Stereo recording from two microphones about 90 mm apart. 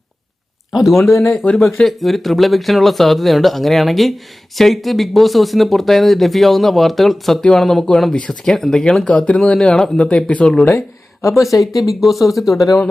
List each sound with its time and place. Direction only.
0.7 s speech: centre (ahead or behind)
1.4 s speech: 20° left (ahead or behind)
1.8 s speech: centre (ahead or behind)
10.7 s speech: 30° left (ahead or behind)
11.8 s speech: centre (ahead or behind)